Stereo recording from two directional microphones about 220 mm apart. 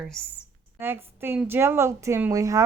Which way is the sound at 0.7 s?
10° right (ahead or behind).